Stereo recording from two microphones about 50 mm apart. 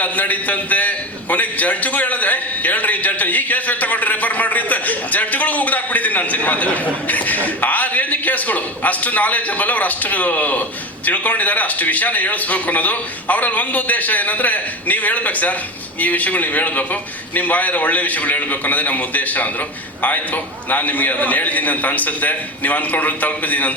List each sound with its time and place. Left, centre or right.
0.0 s a man's voice: left